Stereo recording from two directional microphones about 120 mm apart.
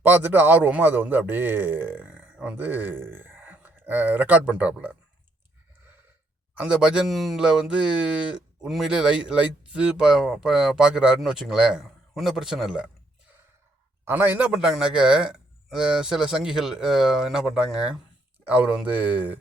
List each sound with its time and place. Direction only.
0.0 s a man's voice: 15° right (ahead or behind)
6.5 s speech: 10° right (ahead or behind)
14.0 s a man's voice: 15° right (ahead or behind)
14.5 s a man's voice: 5° right (ahead or behind)